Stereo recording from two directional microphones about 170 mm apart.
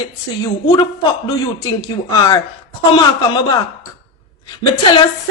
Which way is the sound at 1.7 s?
20° left (ahead or behind).